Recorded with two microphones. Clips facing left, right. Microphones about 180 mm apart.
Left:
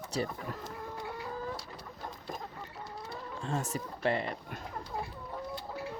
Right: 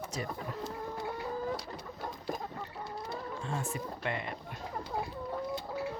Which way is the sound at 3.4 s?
40° left (ahead or behind).